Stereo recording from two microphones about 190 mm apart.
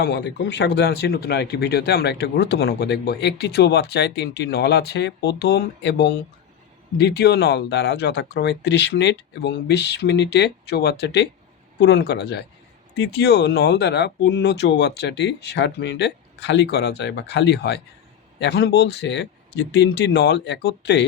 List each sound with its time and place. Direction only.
0.0 s speech: 65° left (ahead or behind)